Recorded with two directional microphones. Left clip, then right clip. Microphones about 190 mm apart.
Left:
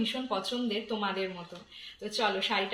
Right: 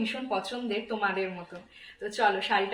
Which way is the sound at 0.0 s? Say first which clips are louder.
Right 1 dB; 25° right (ahead or behind).